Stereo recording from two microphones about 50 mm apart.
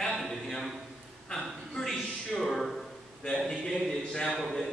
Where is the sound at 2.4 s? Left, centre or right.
Centre.